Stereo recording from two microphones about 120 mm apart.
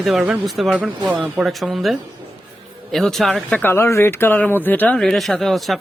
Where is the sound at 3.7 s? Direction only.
20° left (ahead or behind).